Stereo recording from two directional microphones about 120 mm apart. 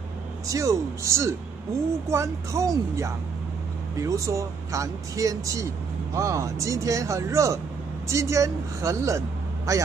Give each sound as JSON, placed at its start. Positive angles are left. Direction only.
{"t": 0.5, "sound": "speech", "side_deg": -25}